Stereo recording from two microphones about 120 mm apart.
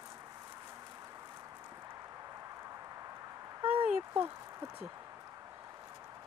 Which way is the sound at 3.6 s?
15° right (ahead or behind).